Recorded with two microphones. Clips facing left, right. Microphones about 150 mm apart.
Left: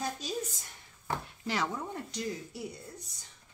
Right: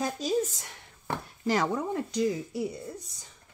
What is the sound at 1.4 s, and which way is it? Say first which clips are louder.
Chopping: right 8 dB; 45° right (ahead or behind).